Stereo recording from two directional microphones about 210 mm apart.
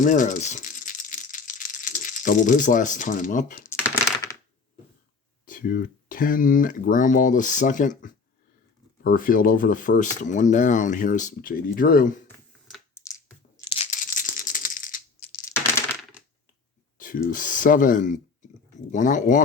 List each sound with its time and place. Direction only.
0.0 s rattle: 40° left (ahead or behind)
5.5 s speech: 40° left (ahead or behind)
13.6 s tearing: 25° left (ahead or behind)
14.0 s a sound: 40° left (ahead or behind)
15.3 s a sound: 15° left (ahead or behind)
17.0 s speech: 40° left (ahead or behind)